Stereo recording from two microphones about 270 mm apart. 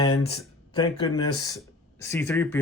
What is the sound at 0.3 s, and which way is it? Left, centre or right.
Speech, centre.